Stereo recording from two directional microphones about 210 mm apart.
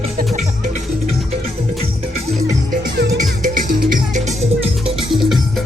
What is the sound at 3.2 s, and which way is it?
Music, 40° right (ahead or behind).